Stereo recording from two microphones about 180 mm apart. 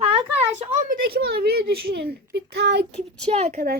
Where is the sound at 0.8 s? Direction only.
55° right (ahead or behind).